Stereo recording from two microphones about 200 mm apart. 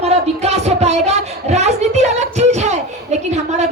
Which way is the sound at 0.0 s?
30° right (ahead or behind).